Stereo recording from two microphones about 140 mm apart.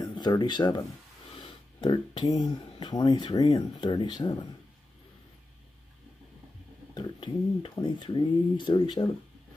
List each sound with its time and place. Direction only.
0.0 s speech: 30° left (ahead or behind)
6.9 s speech: 30° left (ahead or behind)